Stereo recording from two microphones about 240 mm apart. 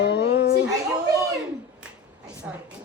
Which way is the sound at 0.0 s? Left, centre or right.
Left.